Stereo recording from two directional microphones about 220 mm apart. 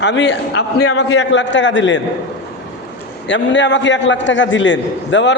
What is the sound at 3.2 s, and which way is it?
A man's voice, 55° left (ahead or behind).